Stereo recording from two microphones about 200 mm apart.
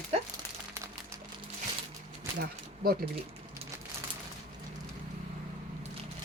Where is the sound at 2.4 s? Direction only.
50° right (ahead or behind).